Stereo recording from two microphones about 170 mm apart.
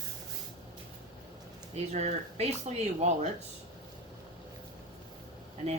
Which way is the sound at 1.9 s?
45° right (ahead or behind).